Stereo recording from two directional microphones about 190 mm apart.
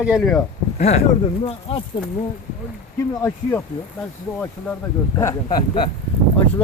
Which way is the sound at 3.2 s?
15° left (ahead or behind).